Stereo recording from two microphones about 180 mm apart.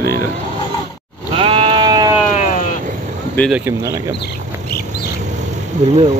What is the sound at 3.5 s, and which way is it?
Speech, 10° right (ahead or behind).